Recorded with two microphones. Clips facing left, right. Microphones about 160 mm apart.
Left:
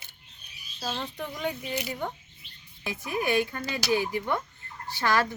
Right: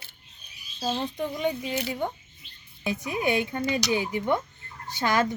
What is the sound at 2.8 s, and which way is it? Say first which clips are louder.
A woman's voice: right 3 dB; 20° right (ahead or behind).